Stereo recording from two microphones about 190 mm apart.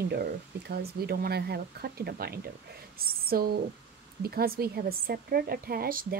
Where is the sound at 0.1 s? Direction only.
55° right (ahead or behind).